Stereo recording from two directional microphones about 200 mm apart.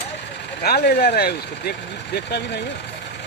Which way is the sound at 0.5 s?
50° left (ahead or behind).